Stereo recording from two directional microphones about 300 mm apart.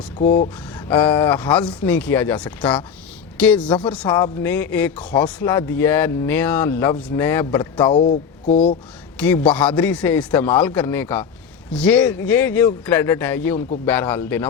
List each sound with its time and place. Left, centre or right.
0.2 s speech: left
0.7 s speech: centre
9.1 s speech: centre